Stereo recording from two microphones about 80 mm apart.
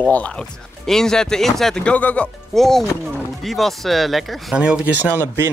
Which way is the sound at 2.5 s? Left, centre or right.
Centre.